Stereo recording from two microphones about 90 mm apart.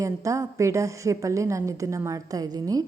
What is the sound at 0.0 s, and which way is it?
A woman's voice, 35° right (ahead or behind).